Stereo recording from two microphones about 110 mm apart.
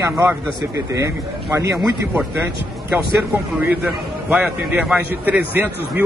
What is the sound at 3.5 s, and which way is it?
A man's voice, 10° right (ahead or behind).